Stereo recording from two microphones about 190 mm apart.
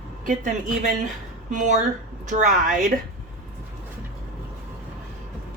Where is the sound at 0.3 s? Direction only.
45° right (ahead or behind).